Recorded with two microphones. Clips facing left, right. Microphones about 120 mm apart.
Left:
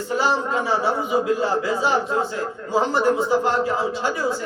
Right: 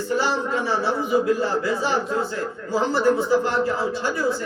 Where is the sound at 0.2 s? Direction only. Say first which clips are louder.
Left 2 dB; 15° left (ahead or behind).